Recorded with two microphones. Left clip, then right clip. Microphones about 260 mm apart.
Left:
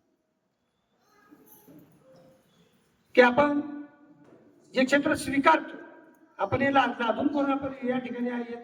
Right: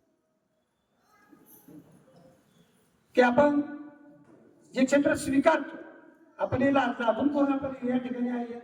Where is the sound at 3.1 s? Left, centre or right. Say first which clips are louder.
Left 2 dB; centre.